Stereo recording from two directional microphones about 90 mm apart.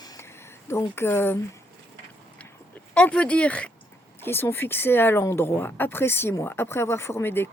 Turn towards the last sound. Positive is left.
turn(degrees=25)  # may be behind; listen again after turning